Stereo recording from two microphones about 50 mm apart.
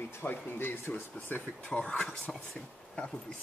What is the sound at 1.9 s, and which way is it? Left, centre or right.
Speech, centre.